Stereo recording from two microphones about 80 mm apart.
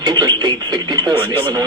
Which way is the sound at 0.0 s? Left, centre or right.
Right.